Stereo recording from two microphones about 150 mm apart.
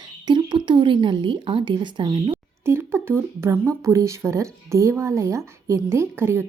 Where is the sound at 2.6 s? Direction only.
15° right (ahead or behind).